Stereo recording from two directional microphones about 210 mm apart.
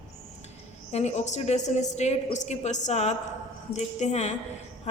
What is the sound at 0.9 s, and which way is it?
A woman's voice, 30° left (ahead or behind).